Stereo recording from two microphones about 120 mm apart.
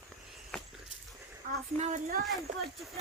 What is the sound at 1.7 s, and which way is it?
Speech, 75° right (ahead or behind).